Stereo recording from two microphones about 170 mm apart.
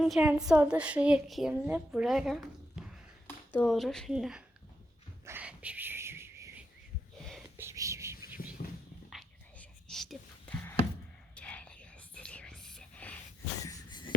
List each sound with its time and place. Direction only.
0.0 s a woman's voice: 5° right (ahead or behind)
5.2 s whispering: 10° right (ahead or behind)
7.6 s whispering: 15° right (ahead or behind)
9.0 s whispering: centre (ahead or behind)
13.7 s a sound: 25° left (ahead or behind)